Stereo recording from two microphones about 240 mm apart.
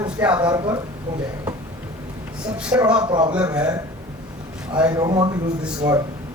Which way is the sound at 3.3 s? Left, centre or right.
Centre.